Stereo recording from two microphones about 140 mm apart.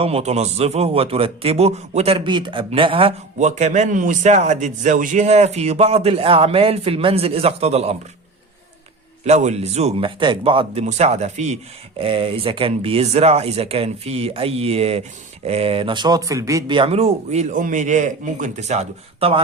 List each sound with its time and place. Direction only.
0.0 s a man's voice: 50° right (ahead or behind)
3.3 s a man's voice: 55° right (ahead or behind)
9.2 s a man's voice: 55° right (ahead or behind)
10.8 s a man's voice: 50° right (ahead or behind)
11.9 s a man's voice: 40° right (ahead or behind); by 16.7 s 25° right (ahead or behind)
16.7 s a man's voice: 40° right (ahead or behind)